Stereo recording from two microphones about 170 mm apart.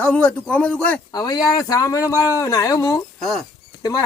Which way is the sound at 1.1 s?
20° left (ahead or behind).